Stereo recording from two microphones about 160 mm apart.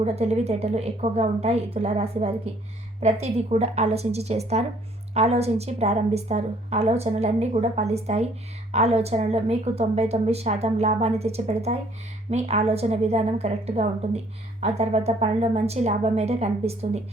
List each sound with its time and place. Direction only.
0.0 s a woman's voice: 40° right (ahead or behind)